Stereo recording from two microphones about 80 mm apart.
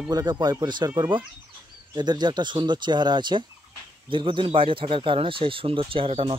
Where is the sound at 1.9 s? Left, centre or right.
Right.